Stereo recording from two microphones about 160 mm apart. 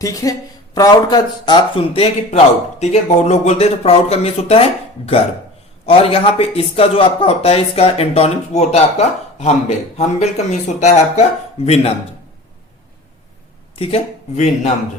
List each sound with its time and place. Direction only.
0.0 s speech: 20° left (ahead or behind); by 11.9 s 40° left (ahead or behind)
13.7 s speech: 40° left (ahead or behind)